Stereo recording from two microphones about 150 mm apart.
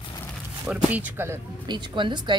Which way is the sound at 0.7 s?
10° right (ahead or behind).